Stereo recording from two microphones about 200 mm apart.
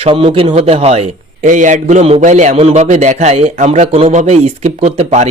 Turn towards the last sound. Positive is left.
turn(degrees=-35)  # may be behind; listen again after turning